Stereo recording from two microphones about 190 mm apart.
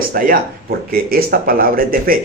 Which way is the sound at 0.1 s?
50° right (ahead or behind).